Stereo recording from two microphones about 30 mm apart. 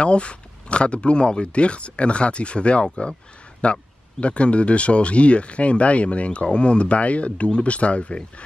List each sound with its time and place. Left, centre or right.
0.0 s speech: left
3.6 s speech: left